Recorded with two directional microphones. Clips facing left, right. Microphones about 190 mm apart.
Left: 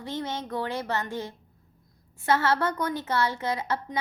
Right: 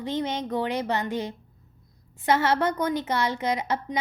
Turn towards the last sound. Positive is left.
turn(degrees=-20)  # may be behind; listen again after turning